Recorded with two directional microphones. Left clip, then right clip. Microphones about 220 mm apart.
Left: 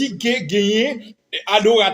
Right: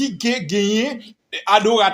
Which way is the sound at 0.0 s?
25° right (ahead or behind).